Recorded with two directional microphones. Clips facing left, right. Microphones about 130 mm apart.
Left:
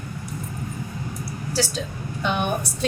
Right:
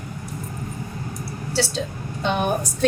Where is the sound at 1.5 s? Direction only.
25° right (ahead or behind).